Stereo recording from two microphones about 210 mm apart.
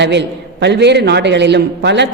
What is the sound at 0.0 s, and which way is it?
A man's voice, 55° right (ahead or behind).